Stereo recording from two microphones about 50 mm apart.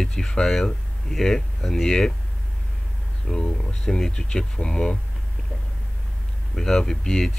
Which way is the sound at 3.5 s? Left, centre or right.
Centre.